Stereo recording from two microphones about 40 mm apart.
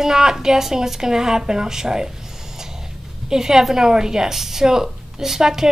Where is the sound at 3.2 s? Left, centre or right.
Centre.